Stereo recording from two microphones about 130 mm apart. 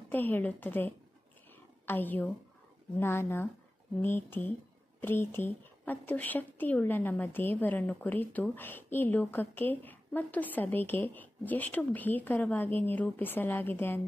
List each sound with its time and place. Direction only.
0.1 s speech: 15° left (ahead or behind)